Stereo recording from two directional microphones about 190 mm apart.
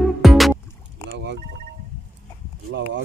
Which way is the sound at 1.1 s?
65° right (ahead or behind).